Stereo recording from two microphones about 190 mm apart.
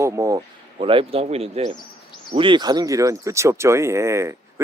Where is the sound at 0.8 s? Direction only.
30° right (ahead or behind).